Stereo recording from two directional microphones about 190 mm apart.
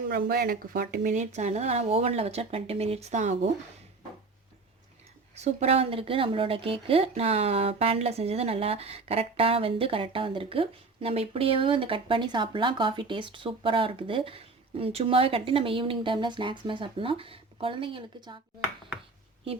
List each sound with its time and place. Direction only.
0.1 s speech: 55° right (ahead or behind)
5.3 s speech: 35° right (ahead or behind)